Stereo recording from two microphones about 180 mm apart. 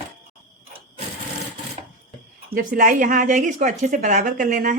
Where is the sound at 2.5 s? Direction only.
50° right (ahead or behind).